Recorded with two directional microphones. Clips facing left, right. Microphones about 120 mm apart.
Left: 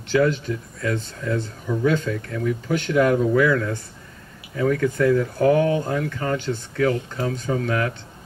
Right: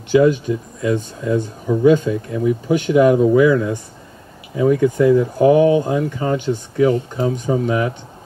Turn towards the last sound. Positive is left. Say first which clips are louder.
# right 5 dB
turn(degrees=-20)  # may be behind; listen again after turning